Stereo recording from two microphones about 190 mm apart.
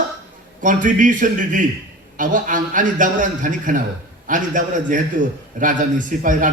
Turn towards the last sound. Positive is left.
turn(degrees=-45)  # may be behind; listen again after turning